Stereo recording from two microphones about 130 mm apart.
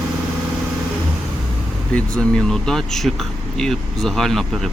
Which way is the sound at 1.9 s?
10° left (ahead or behind).